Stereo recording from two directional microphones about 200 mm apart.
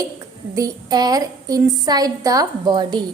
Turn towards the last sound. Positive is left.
turn(degrees=-20)  # may be behind; listen again after turning